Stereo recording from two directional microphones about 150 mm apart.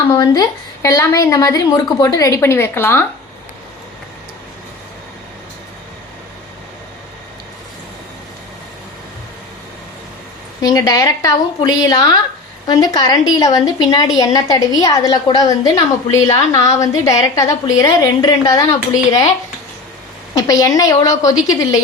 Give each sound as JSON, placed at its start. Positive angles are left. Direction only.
{"t": 0.1, "sound": "a woman's voice", "side_deg": 25}
{"t": 10.6, "sound": "a woman's voice", "side_deg": 25}
{"t": 20.3, "sound": "a woman's voice", "side_deg": 20}